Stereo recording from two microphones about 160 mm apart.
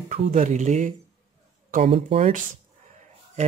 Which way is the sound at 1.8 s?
35° right (ahead or behind).